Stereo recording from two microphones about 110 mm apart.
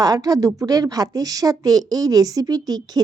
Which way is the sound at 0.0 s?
35° right (ahead or behind).